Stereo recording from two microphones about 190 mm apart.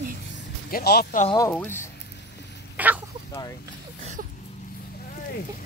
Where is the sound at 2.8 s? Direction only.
10° right (ahead or behind).